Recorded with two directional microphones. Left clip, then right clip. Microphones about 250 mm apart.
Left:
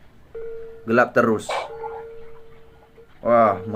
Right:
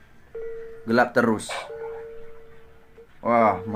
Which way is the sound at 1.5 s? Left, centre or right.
Left.